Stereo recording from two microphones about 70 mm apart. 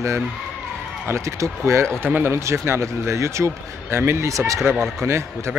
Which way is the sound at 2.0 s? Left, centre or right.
Right.